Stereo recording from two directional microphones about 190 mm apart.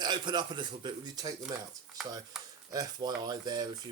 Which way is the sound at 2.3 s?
Centre (ahead or behind).